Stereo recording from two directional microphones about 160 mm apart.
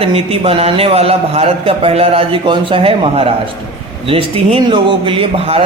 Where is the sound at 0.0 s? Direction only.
35° right (ahead or behind).